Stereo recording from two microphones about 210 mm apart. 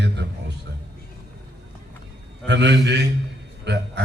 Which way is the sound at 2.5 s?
55° right (ahead or behind).